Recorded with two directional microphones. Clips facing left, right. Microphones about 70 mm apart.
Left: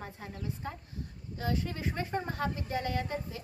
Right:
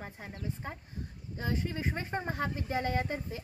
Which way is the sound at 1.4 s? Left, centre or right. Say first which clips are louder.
Even; right.